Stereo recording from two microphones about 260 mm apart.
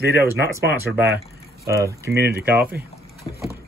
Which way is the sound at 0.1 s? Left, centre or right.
Centre.